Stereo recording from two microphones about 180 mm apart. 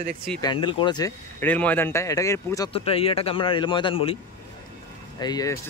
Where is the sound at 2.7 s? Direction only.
30° left (ahead or behind).